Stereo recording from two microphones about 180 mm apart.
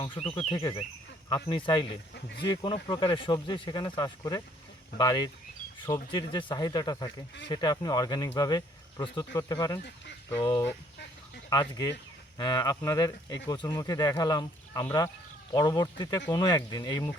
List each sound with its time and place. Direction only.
0.0 s a sound: 30° left (ahead or behind)
1.3 s speech: 30° left (ahead or behind)
11.4 s speech: 25° left (ahead or behind)